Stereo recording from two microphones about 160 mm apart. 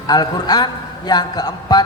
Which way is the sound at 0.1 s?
25° left (ahead or behind).